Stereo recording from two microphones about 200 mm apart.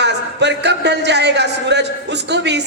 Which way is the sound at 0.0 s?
60° right (ahead or behind).